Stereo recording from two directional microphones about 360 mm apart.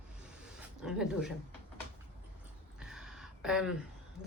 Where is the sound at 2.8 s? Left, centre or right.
Centre.